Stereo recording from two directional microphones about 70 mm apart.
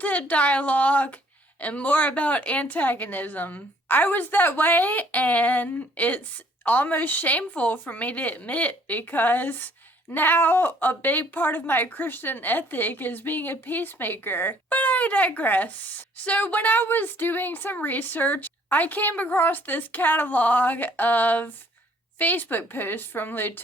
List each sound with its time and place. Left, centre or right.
0.0 s a woman's voice: left